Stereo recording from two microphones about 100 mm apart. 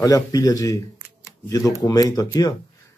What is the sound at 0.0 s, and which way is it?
Speech, 35° left (ahead or behind).